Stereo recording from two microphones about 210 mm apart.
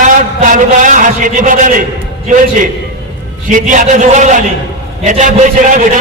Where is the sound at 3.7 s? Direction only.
35° right (ahead or behind).